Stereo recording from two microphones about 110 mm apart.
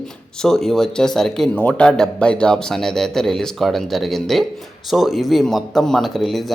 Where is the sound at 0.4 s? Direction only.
5° left (ahead or behind).